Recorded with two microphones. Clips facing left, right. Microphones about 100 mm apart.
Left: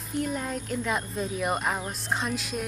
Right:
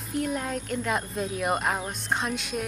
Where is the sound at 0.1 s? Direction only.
Centre (ahead or behind).